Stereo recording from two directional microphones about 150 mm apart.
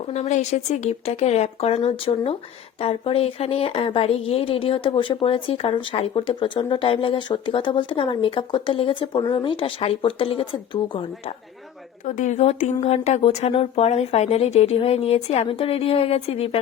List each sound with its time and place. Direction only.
0.1 s speech: 50° left (ahead or behind)
12.0 s speech: 55° left (ahead or behind)